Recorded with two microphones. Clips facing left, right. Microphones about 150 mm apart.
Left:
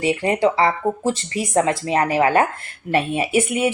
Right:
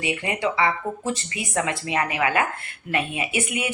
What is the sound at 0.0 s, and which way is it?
Speech, 35° left (ahead or behind).